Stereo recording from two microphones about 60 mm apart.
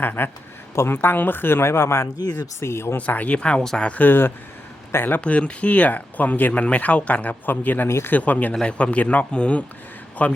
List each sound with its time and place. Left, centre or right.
0.0 s speech: left
3.1 s speech: left
3.6 s speech: centre
3.8 s speech: left
5.2 s speech: centre
7.9 s speech: left
8.1 s speech: left